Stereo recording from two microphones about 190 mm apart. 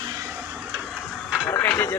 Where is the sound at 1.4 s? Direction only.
10° left (ahead or behind).